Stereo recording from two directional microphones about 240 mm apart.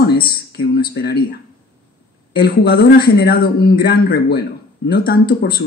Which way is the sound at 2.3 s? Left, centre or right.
Left.